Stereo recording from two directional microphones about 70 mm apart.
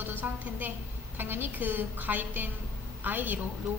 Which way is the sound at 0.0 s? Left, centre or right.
Right.